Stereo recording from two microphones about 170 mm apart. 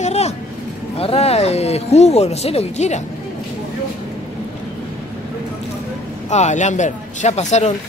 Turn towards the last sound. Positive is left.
turn(degrees=40)  # may be behind; listen again after turning